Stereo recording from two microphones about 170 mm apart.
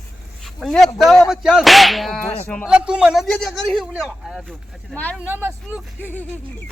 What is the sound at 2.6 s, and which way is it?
A man's voice, 5° right (ahead or behind).